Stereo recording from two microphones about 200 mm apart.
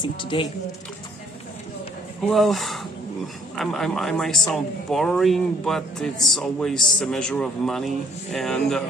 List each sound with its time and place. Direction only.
0.0 s speech: 25° left (ahead or behind)
2.2 s speech: centre (ahead or behind)